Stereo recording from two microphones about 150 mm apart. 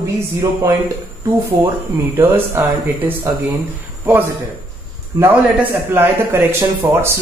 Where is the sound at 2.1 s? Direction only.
15° right (ahead or behind).